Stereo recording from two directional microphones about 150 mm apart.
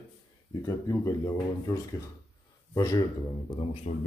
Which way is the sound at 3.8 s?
40° left (ahead or behind).